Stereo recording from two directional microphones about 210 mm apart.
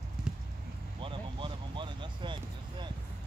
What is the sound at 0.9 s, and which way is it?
Vehicle, 25° right (ahead or behind).